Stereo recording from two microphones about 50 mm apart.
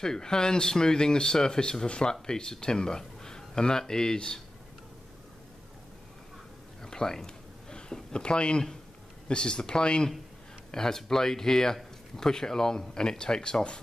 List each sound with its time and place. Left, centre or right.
0.0 s speech: centre
6.8 s a sound: centre
9.3 s speech: centre